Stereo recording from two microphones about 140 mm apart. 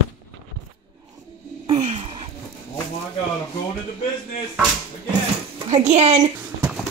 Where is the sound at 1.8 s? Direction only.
55° right (ahead or behind).